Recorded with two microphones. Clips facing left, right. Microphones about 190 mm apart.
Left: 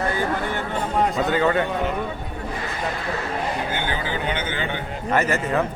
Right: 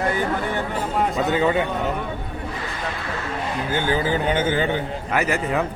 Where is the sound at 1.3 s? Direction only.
10° right (ahead or behind).